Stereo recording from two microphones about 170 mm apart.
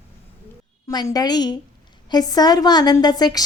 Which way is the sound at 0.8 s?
20° left (ahead or behind).